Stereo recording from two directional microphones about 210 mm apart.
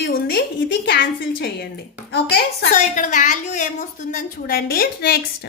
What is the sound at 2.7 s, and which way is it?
A woman's voice, 35° left (ahead or behind).